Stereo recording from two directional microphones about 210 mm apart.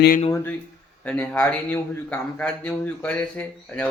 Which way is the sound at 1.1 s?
5° left (ahead or behind).